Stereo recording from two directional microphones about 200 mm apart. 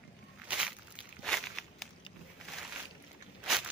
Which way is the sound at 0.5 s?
5° right (ahead or behind).